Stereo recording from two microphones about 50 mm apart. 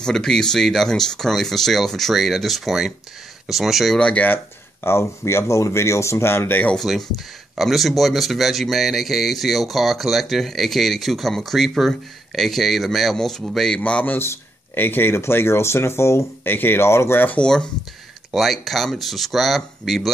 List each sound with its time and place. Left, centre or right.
0.0 s speech: centre
4.0 s speech: left
4.8 s speech: left
6.8 s speech: centre
13.7 s speech: left
14.8 s speech: left
16.4 s speech: left
17.4 s speech: centre
18.3 s speech: centre